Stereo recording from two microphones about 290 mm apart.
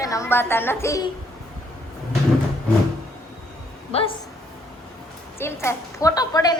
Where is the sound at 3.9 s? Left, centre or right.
Left.